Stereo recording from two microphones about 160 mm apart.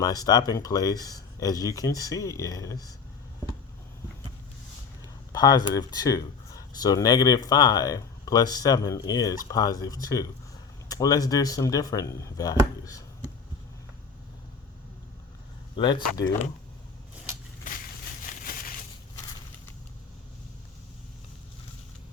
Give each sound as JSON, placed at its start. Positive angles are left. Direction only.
{"t": 0.0, "sound": "speech", "side_deg": 25}
{"t": 5.3, "sound": "speech", "side_deg": 25}
{"t": 15.7, "sound": "speech", "side_deg": 30}
{"t": 18.2, "sound": "a sound", "side_deg": 55}